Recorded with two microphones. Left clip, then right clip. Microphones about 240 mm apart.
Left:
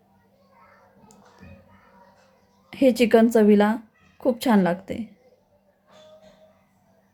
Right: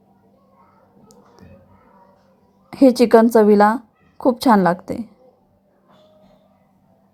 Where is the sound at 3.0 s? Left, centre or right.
Centre.